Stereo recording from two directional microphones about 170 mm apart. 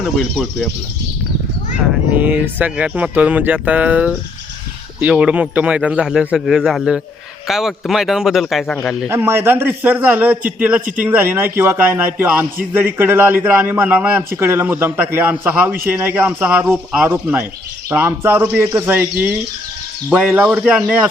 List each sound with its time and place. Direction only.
0.0 s a man's voice: centre (ahead or behind)
2.1 s a man's voice: 10° right (ahead or behind)
9.0 s speech: 15° right (ahead or behind)